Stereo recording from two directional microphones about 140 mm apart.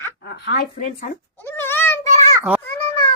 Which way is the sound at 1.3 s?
15° left (ahead or behind).